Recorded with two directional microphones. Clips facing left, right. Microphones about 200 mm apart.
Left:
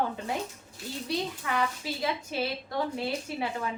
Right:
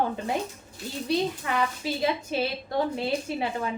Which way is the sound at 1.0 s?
25° right (ahead or behind).